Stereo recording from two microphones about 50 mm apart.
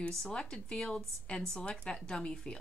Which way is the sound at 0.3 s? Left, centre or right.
Centre.